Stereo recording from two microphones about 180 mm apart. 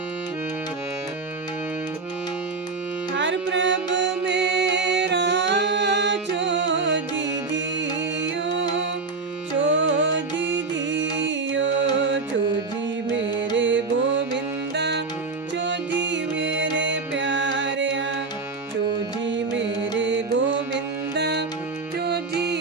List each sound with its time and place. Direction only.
3.2 s music: 85° right
9.6 s music: 90° right
13.6 s music: 90° right; by 15.0 s 70° right (ahead or behind)
15.5 s music: 85° right
19.2 s music: 90° right; by 22.5 s 65° right (ahead or behind)